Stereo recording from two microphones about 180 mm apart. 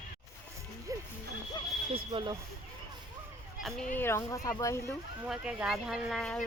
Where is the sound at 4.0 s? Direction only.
15° left (ahead or behind).